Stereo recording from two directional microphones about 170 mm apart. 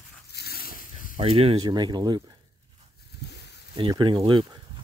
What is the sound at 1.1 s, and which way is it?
Speech, 35° right (ahead or behind).